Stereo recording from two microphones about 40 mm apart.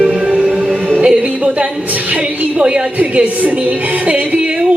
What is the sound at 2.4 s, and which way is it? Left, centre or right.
Speech, right.